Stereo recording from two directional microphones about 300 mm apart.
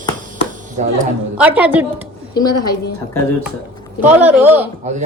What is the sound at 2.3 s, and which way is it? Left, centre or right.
Speech, centre.